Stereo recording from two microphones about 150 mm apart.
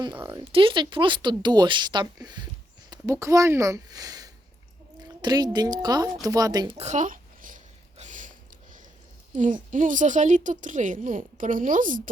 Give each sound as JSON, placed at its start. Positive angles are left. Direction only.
{"t": 0.4, "sound": "speech", "side_deg": -35}
{"t": 6.7, "sound": "a sound", "side_deg": -50}
{"t": 9.3, "sound": "a woman's voice", "side_deg": -55}